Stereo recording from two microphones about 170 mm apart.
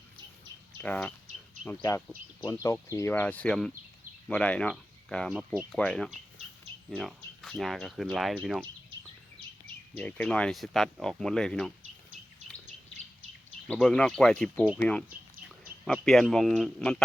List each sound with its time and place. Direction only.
0.8 s speech: 10° left (ahead or behind)
10.0 s speech: 10° left (ahead or behind)
13.7 s speech: 5° left (ahead or behind)